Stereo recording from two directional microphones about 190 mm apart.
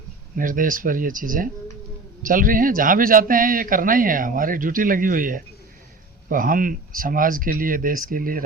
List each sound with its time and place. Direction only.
0.3 s speech: 45° right (ahead or behind)